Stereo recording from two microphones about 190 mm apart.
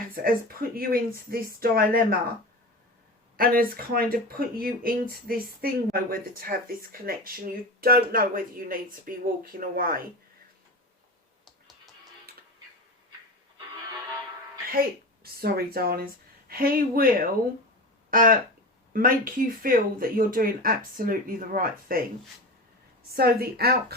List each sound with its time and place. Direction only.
0.1 s speech: 50° right (ahead or behind)
3.3 s speech: 50° right (ahead or behind)
12.3 s music: 55° right (ahead or behind)
14.7 s speech: 50° right (ahead or behind)
23.0 s speech: 55° right (ahead or behind)